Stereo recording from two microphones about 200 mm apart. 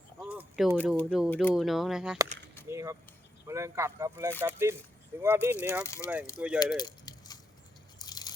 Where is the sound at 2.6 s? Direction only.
15° right (ahead or behind).